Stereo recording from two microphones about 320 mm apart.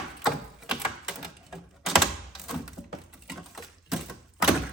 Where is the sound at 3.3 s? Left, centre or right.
Centre.